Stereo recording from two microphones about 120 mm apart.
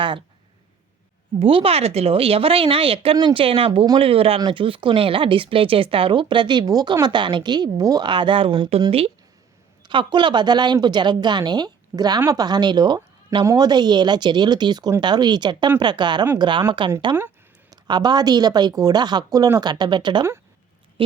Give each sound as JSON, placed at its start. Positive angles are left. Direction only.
{"t": 1.4, "sound": "speech", "side_deg": -50}
{"t": 9.8, "sound": "speech", "side_deg": -40}